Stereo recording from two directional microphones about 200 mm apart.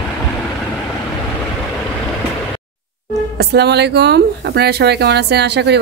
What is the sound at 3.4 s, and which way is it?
Speech, 55° right (ahead or behind).